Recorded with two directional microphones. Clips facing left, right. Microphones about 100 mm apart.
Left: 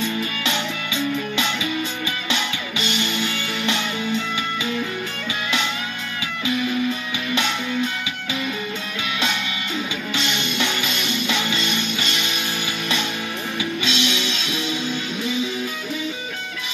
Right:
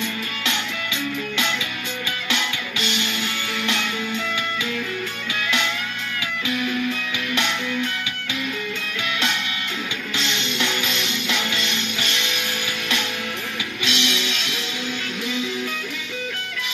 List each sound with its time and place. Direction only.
2.2 s music: 20° left (ahead or behind)
7.3 s music: 20° left (ahead or behind)
10.1 s music: 15° left (ahead or behind)
13.8 s music: 20° left (ahead or behind)